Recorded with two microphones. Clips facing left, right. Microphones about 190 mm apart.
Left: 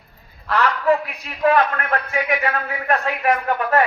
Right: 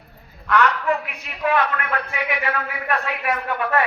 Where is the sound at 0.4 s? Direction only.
35° left (ahead or behind).